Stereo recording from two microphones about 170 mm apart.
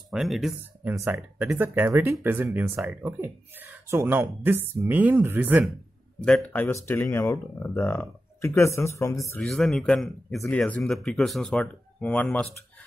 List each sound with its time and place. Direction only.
0.1 s speech: centre (ahead or behind)
6.2 s speech: 10° left (ahead or behind)
9.4 s speech: 5° left (ahead or behind)